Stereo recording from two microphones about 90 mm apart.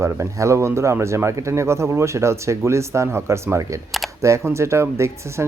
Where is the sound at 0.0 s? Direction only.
35° right (ahead or behind).